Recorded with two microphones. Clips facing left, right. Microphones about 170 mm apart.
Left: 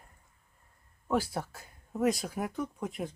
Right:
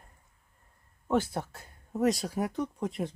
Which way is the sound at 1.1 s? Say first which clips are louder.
Right 2 dB; centre (ahead or behind).